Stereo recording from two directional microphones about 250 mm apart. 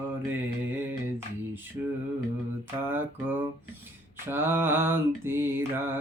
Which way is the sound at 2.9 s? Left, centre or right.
Centre.